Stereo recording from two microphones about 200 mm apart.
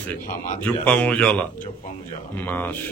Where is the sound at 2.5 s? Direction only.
10° left (ahead or behind).